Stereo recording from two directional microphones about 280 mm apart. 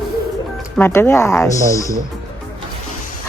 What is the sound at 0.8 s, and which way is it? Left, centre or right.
Speech, centre.